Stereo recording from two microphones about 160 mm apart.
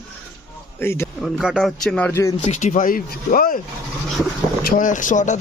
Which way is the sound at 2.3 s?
45° left (ahead or behind).